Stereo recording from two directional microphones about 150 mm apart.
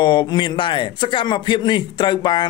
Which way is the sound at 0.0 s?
30° left (ahead or behind).